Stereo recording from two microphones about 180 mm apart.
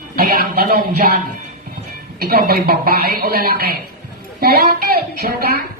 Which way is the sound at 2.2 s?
60° right (ahead or behind).